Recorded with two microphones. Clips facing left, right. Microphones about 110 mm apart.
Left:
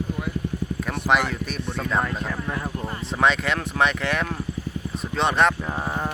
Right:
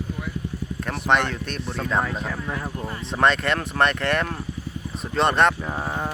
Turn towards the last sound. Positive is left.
turn(degrees=0)  # may be behind; listen again after turning